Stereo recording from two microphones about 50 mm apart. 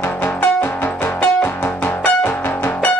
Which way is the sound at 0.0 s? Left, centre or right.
Left.